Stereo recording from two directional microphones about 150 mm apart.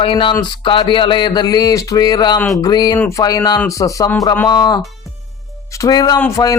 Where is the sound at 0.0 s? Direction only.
35° left (ahead or behind).